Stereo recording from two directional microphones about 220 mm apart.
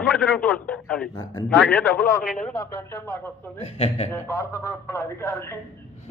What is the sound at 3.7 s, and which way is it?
Speech, 25° left (ahead or behind).